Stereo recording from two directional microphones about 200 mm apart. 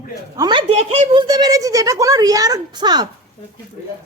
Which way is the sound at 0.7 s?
30° right (ahead or behind).